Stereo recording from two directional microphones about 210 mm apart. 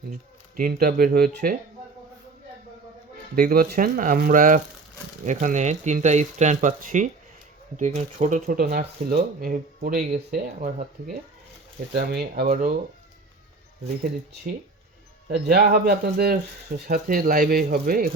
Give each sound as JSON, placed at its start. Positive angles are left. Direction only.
{"t": 0.1, "sound": "speech", "side_deg": -40}
{"t": 3.3, "sound": "speech", "side_deg": -45}
{"t": 11.9, "sound": "speech", "side_deg": -50}
{"t": 15.3, "sound": "speech", "side_deg": -50}